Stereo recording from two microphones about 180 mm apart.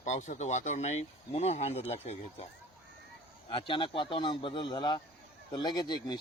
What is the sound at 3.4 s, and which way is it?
A man's voice, 25° left (ahead or behind).